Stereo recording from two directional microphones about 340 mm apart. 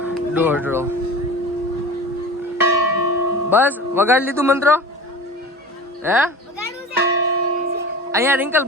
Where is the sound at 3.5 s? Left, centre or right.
Centre.